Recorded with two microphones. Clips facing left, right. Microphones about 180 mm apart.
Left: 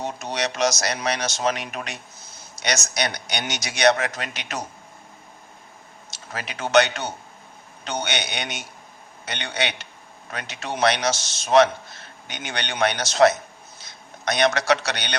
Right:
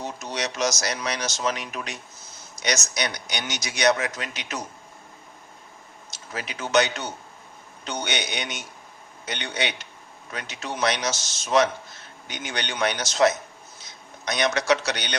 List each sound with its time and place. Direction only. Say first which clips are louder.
0.0 s speech: left 3 dB; 60° left (ahead or behind)
6.1 s speech: left 1 dB; 65° left (ahead or behind)
13.8 s a sound: left 5 dB; 65° left (ahead or behind)
14.7 s speech: left 1 dB; 60° left (ahead or behind)